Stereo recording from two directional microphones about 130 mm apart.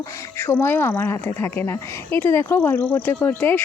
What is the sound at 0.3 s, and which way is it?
Speech, 20° left (ahead or behind).